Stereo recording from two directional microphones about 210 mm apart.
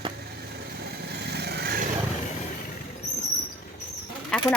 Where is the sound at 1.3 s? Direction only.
50° right (ahead or behind).